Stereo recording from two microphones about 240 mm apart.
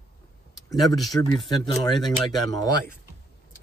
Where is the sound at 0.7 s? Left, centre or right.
Centre.